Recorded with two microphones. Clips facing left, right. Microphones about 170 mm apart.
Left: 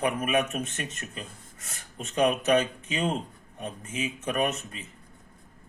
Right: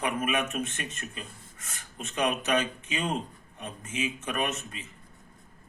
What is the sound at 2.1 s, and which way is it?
A man's voice, 35° left (ahead or behind).